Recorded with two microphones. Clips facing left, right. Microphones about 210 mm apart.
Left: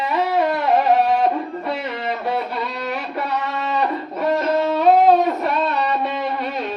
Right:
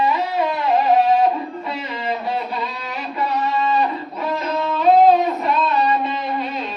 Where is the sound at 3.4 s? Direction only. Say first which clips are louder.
Right 3 dB; 65° left (ahead or behind).